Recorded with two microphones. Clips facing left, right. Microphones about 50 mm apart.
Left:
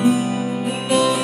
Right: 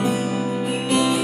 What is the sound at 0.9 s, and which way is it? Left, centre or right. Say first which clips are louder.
Music: left 3 dB; centre.